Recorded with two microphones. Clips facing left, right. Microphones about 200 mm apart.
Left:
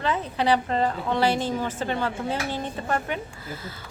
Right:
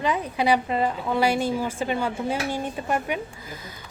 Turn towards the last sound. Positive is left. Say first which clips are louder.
# right 1 dB
turn(degrees=-10)  # may be behind; listen again after turning